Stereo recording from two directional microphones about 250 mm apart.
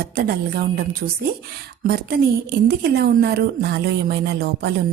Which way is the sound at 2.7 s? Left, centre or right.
Right.